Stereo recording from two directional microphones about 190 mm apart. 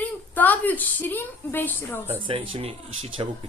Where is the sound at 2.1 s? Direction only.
30° right (ahead or behind).